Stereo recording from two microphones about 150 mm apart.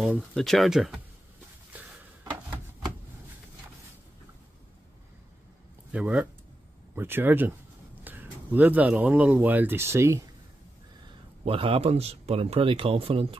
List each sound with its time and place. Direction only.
0.0 s speech: 5° right (ahead or behind)
1.7 s chopping: 10° right (ahead or behind)
5.9 s speech: 5° right (ahead or behind)
11.4 s a man's voice: 40° right (ahead or behind)